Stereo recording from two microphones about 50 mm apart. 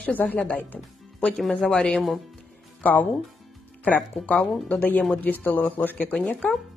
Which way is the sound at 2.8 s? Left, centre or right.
Left.